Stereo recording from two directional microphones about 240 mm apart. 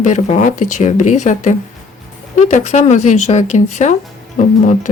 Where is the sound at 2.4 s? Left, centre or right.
Left.